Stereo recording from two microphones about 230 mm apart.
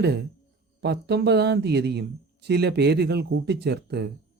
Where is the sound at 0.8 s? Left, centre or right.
Right.